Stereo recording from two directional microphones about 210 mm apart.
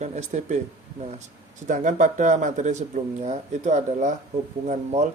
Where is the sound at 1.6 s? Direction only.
35° right (ahead or behind).